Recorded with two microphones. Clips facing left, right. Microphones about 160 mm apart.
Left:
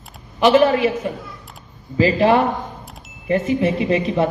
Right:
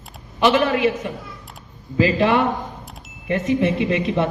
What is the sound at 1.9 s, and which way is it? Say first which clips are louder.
Speech: left 2 dB; 35° left (ahead or behind).